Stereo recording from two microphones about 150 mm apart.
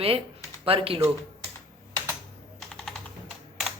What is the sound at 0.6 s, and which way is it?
Speech, 40° right (ahead or behind).